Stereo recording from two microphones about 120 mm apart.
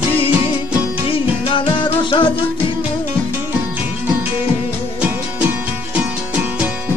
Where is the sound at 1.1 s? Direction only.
50° left (ahead or behind).